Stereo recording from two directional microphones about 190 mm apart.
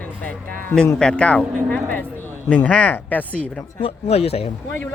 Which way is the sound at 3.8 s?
30° left (ahead or behind).